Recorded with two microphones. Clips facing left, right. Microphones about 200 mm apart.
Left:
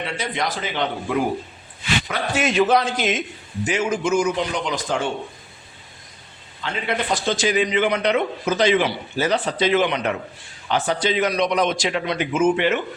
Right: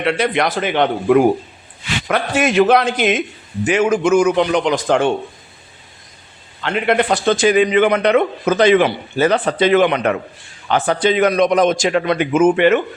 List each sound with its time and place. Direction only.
0.0 s a man's voice: 70° right (ahead or behind)
6.6 s a man's voice: 65° right (ahead or behind)